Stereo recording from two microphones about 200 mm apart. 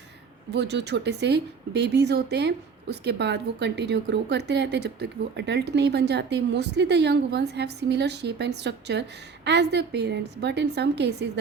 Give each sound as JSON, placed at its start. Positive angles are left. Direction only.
{"t": 0.5, "sound": "a woman's voice", "side_deg": -60}